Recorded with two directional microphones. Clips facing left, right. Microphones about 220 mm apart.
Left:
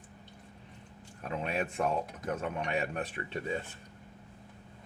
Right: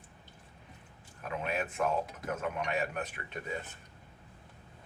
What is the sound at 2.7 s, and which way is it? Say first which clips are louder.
Speech: left 1 dB; 30° left (ahead or behind).